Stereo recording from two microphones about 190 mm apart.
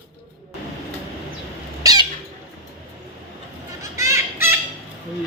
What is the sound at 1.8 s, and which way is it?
Squawk, 20° right (ahead or behind).